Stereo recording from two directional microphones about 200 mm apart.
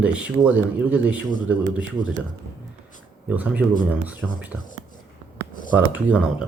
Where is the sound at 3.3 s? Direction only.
10° right (ahead or behind).